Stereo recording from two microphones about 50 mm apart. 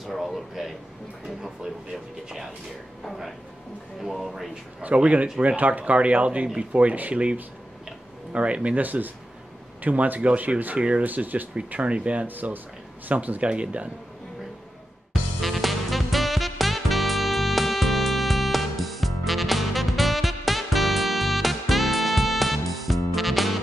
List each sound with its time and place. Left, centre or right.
0.0 s a sound: centre
1.2 s speech: centre
3.1 s speech: centre
4.8 s speech: right
11.1 s speech: right
11.7 s speech: right
15.4 s music: centre